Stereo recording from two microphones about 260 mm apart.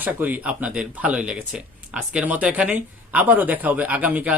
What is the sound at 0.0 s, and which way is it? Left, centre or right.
Speech, centre.